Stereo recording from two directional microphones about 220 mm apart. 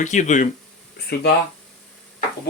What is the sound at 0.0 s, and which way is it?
Speech, 35° left (ahead or behind).